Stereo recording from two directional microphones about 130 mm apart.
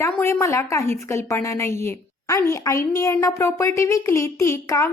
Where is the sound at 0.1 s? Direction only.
20° left (ahead or behind).